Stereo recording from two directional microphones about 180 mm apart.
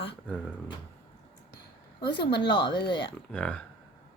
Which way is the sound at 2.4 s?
25° left (ahead or behind).